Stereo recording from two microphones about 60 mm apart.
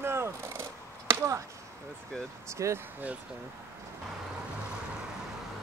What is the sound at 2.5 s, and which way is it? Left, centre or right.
Speech, right.